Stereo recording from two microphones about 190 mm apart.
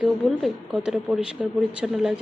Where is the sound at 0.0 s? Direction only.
Centre (ahead or behind).